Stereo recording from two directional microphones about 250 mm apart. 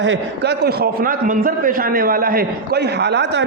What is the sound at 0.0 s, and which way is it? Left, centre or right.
A man's voice, right.